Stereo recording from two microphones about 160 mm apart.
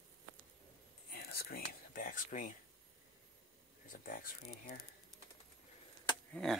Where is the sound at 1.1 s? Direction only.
75° left (ahead or behind); by 2.5 s 55° left (ahead or behind).